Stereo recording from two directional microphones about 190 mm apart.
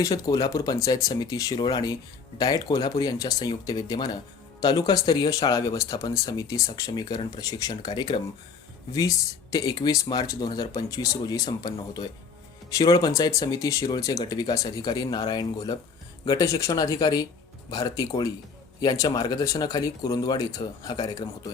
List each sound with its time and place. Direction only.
0.0 s speech: 20° left (ahead or behind)